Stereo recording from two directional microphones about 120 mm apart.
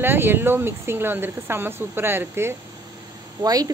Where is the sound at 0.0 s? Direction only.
20° right (ahead or behind).